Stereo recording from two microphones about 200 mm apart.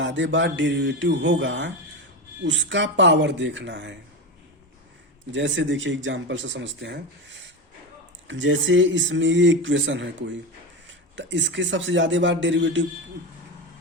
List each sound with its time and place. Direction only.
0.0 s a man's voice: 65° right (ahead or behind)
5.3 s a man's voice: 65° right (ahead or behind)